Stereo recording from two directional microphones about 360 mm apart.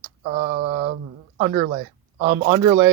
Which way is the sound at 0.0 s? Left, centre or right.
Right.